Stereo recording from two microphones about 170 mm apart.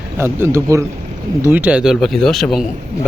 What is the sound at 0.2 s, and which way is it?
Speech, 15° right (ahead or behind).